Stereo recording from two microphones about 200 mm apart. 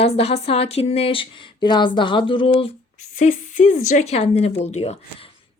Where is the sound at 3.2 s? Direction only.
40° left (ahead or behind).